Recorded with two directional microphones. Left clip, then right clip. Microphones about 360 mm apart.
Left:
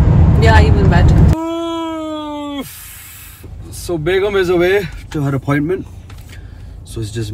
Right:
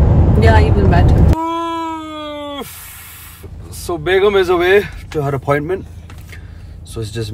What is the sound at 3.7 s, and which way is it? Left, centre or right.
Speech, centre.